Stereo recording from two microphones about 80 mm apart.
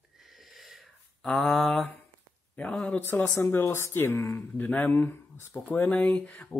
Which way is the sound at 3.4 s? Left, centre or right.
Left.